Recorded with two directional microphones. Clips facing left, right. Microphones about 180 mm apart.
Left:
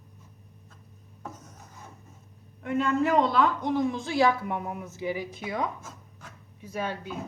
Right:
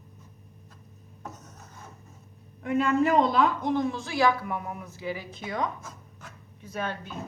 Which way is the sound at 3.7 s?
20° left (ahead or behind).